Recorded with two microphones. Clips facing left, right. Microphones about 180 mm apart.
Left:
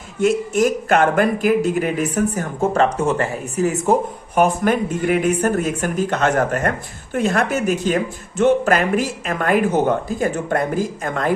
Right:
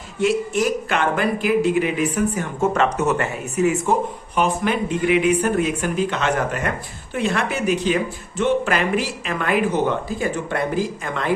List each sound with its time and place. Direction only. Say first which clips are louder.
0.2 s speech: left 3 dB; 45° left (ahead or behind)